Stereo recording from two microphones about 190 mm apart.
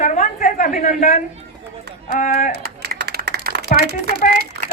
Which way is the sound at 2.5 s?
55° right (ahead or behind).